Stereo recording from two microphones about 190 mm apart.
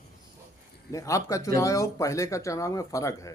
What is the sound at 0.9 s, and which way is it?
Speech, 15° left (ahead or behind).